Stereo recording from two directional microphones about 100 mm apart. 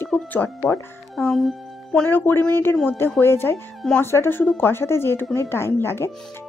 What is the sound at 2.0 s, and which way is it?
A woman's voice, 20° left (ahead or behind).